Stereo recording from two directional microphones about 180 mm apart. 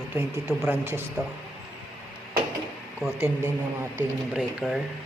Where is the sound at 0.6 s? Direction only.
10° right (ahead or behind).